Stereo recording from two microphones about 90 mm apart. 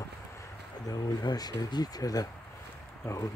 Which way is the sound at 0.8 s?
45° left (ahead or behind).